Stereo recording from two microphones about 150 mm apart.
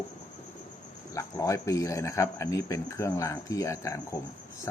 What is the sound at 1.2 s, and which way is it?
A man's voice, 20° left (ahead or behind).